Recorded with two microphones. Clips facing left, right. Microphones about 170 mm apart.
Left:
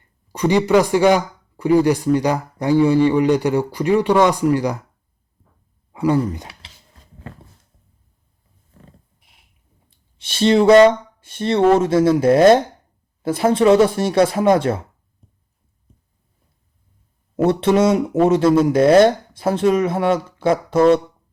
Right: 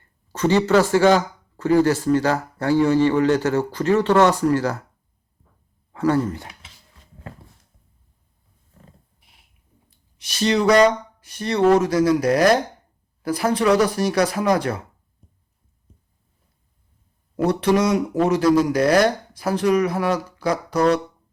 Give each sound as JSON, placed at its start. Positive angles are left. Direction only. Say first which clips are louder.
{"t": 0.3, "sound": "speech", "louder": "left 2 dB", "side_deg": 15}
{"t": 5.9, "sound": "speech", "louder": "left 2 dB", "side_deg": 10}
{"t": 10.2, "sound": "speech", "louder": "left 5 dB", "side_deg": 30}
{"t": 17.3, "sound": "speech", "louder": "left 3 dB", "side_deg": 25}